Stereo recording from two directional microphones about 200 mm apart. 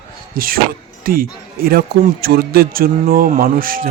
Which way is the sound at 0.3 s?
45° right (ahead or behind).